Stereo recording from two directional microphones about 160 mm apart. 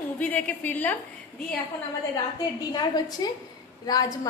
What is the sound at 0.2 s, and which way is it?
Speech, 10° left (ahead or behind).